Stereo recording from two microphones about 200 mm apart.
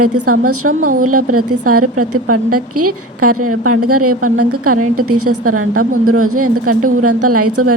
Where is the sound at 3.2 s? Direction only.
90° right.